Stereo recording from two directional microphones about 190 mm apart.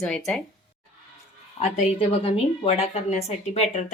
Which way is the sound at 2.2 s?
30° left (ahead or behind).